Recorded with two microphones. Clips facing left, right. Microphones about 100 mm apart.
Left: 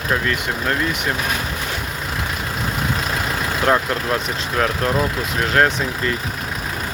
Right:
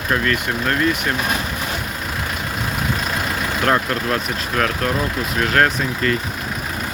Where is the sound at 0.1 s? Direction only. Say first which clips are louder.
Right 1 dB; 15° left (ahead or behind).